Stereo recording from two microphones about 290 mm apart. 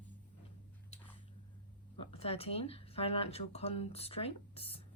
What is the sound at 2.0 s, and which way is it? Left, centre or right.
Speech, centre.